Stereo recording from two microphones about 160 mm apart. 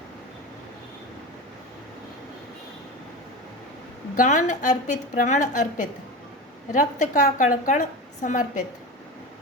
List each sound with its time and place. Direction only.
4.2 s a woman's voice: 50° left (ahead or behind)